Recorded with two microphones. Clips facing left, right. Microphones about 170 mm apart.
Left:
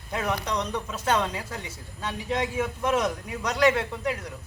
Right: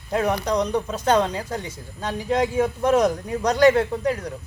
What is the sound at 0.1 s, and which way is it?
A man's voice, 35° right (ahead or behind).